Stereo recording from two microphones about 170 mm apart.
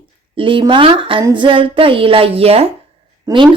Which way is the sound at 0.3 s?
30° right (ahead or behind).